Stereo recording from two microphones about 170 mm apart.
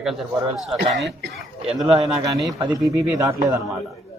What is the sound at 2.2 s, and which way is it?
Speech, 20° right (ahead or behind).